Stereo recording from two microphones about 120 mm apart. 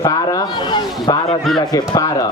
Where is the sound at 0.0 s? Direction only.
35° left (ahead or behind).